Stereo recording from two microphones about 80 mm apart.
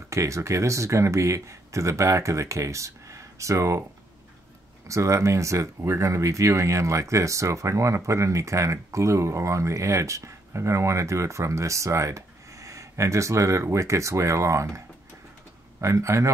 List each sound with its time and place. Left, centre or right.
0.1 s speech: right
4.8 s speech: right
15.8 s speech: right